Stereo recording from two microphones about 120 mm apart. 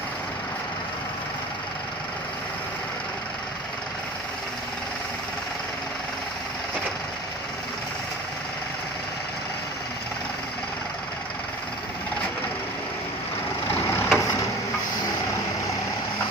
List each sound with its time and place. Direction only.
13.7 s vehicle: 20° left (ahead or behind)